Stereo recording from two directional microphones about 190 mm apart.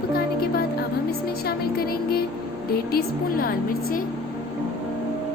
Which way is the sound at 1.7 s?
55° left (ahead or behind).